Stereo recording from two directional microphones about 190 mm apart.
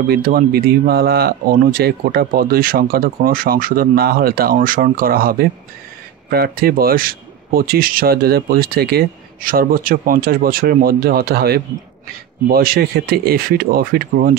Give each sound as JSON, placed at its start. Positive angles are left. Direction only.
{"t": 0.1, "sound": "speech", "side_deg": -50}